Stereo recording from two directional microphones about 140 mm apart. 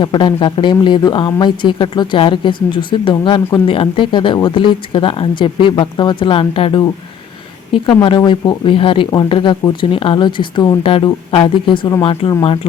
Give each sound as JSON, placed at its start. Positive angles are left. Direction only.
{"t": 0.0, "sound": "speech", "side_deg": 30}
{"t": 8.0, "sound": "speech", "side_deg": 35}